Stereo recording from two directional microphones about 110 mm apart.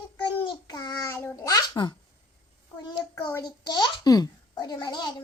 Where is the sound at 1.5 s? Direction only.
40° left (ahead or behind).